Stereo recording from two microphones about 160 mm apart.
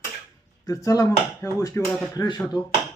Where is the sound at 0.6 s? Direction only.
20° left (ahead or behind).